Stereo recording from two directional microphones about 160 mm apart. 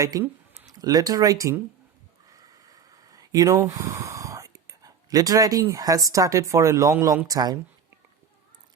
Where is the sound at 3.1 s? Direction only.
20° right (ahead or behind).